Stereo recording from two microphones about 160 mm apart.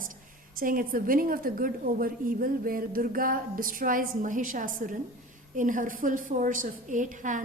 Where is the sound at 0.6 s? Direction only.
60° right (ahead or behind).